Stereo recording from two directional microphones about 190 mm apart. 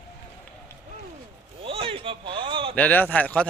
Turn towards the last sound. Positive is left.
turn(degrees=10)  # may be behind; listen again after turning